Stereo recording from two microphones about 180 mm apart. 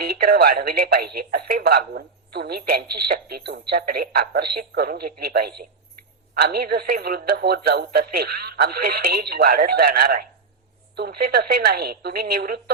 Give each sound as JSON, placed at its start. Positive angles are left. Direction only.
{"t": 0.0, "sound": "speech", "side_deg": -60}